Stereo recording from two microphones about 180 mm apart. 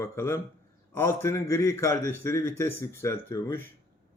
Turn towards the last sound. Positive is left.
turn(degrees=15)  # may be behind; listen again after turning